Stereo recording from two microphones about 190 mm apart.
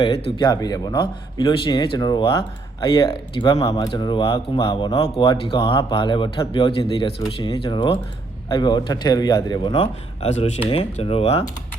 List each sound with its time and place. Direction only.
0.3 s speech: 20° left (ahead or behind)